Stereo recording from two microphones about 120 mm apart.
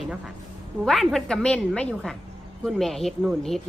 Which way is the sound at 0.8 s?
Centre (ahead or behind).